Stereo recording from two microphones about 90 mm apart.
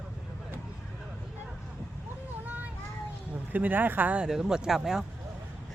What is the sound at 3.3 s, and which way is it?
Speech, 20° right (ahead or behind).